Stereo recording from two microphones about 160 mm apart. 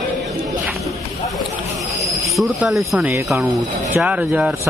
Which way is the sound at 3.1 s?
15° right (ahead or behind).